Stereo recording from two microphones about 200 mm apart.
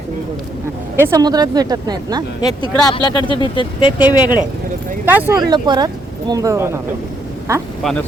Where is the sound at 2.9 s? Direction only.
25° left (ahead or behind).